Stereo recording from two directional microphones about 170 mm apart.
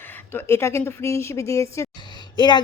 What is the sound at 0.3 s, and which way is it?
A woman's voice, 15° left (ahead or behind).